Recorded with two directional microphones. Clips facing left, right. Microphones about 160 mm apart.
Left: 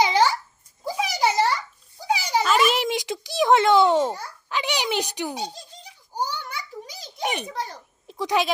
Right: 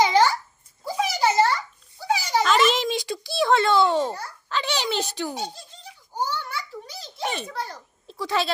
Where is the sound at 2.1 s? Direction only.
10° left (ahead or behind).